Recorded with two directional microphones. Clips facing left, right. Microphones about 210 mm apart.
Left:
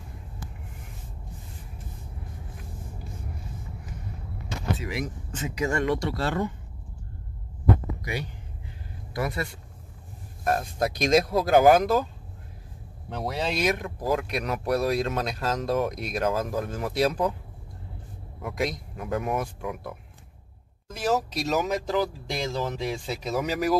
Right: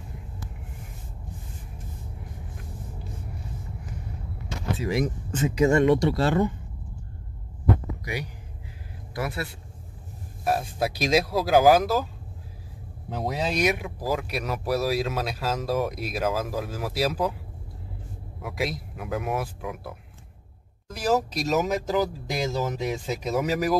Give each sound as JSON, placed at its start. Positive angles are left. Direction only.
{"t": 4.7, "sound": "speech", "side_deg": -35}
{"t": 5.5, "sound": "speech", "side_deg": -25}
{"t": 9.2, "sound": "speech", "side_deg": -5}
{"t": 13.2, "sound": "speech", "side_deg": -15}
{"t": 18.4, "sound": "speech", "side_deg": -5}